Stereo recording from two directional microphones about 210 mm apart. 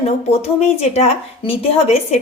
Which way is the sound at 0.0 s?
30° left (ahead or behind).